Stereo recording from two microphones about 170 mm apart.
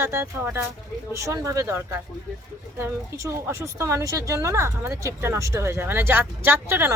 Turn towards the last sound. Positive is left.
turn(degrees=-15)  # may be behind; listen again after turning